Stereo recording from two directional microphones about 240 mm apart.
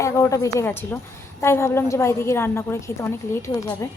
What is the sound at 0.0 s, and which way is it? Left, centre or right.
A woman's voice, centre.